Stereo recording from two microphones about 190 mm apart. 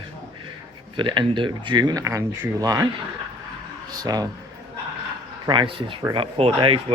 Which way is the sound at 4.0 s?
20° right (ahead or behind).